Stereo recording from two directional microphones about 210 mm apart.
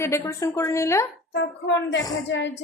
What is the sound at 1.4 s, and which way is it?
Speech, 55° left (ahead or behind).